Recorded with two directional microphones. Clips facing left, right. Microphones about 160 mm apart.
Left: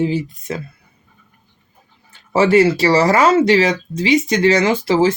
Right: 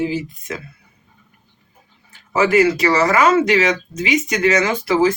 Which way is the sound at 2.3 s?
30° left (ahead or behind).